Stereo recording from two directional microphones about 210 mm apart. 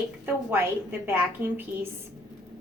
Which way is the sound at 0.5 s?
10° right (ahead or behind).